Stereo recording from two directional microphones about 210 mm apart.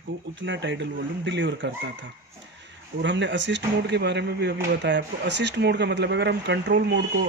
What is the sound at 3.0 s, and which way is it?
Speech, 60° right (ahead or behind).